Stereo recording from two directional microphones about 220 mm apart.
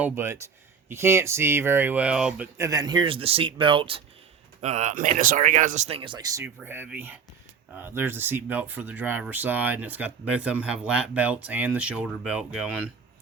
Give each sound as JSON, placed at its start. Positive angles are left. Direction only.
{"t": 0.0, "sound": "speech", "side_deg": -10}
{"t": 2.6, "sound": "speech", "side_deg": -15}